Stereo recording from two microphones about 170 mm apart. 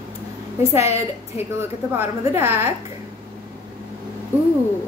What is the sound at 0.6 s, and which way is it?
A woman's voice, 15° right (ahead or behind).